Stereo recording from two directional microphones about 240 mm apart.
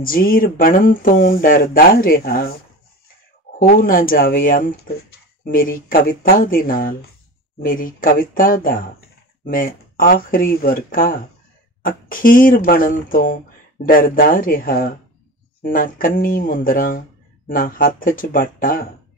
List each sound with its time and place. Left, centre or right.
0.0 s speech: left
3.5 s speech: left